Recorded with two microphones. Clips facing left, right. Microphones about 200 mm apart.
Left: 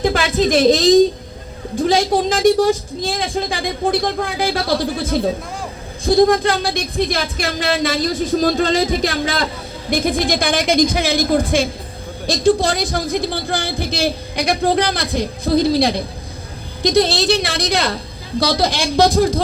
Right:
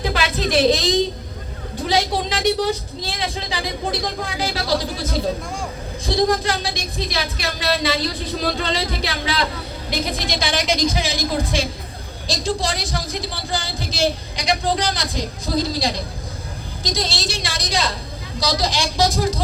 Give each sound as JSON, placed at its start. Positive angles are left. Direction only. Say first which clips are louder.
{"t": 0.0, "sound": "a woman's voice", "louder": "left 6 dB", "side_deg": 45}
{"t": 6.1, "sound": "a man's voice", "louder": "left 6 dB", "side_deg": 50}